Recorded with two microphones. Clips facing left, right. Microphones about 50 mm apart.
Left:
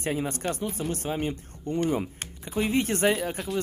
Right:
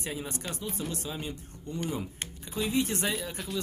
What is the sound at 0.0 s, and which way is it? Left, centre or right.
A man's voice, left.